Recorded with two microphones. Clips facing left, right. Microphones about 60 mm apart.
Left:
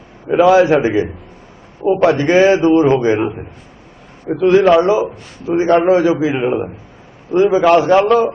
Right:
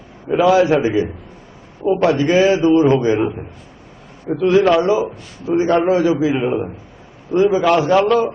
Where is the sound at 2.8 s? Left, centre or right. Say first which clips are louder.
Left 1 dB; left.